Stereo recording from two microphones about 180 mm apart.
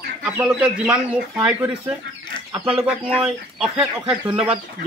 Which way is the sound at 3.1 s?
5° right (ahead or behind).